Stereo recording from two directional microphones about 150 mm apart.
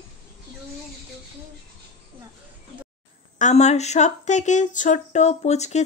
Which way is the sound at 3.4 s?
50° left (ahead or behind).